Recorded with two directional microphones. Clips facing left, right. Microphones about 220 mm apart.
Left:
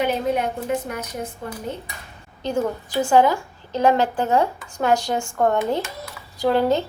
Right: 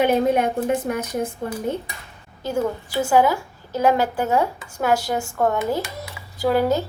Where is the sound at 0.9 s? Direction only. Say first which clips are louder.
Right 6 dB; 50° right (ahead or behind).